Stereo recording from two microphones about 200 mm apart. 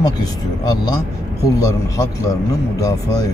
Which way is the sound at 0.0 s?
20° left (ahead or behind).